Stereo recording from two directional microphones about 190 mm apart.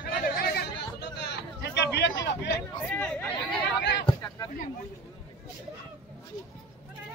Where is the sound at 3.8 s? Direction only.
65° left (ahead or behind).